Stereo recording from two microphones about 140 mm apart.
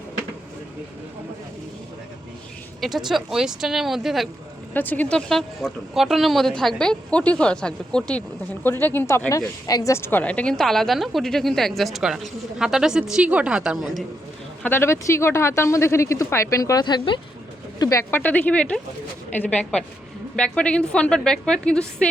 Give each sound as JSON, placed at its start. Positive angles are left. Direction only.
{"t": 2.8, "sound": "speech", "side_deg": 0}
{"t": 4.7, "sound": "a woman's voice", "side_deg": 10}
{"t": 14.6, "sound": "speech", "side_deg": 15}
{"t": 16.8, "sound": "speech", "side_deg": 35}
{"t": 18.1, "sound": "a woman's voice", "side_deg": 10}